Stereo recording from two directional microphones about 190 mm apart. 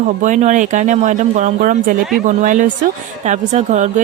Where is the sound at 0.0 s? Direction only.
40° right (ahead or behind).